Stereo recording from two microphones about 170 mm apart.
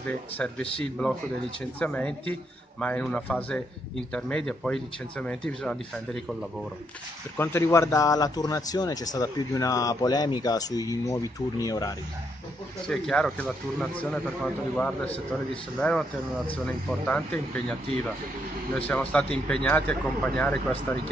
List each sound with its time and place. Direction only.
0.0 s speech: 10° left (ahead or behind)
7.3 s speech: 15° left (ahead or behind)
12.8 s speech: 5° left (ahead or behind)
18.8 s speech: 5° left (ahead or behind)